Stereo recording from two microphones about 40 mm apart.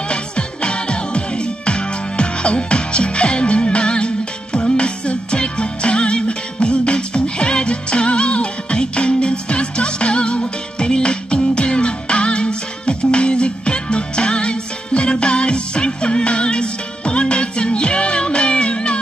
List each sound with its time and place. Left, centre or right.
0.1 s music: left